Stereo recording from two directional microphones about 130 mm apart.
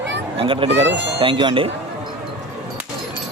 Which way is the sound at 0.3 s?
40° right (ahead or behind).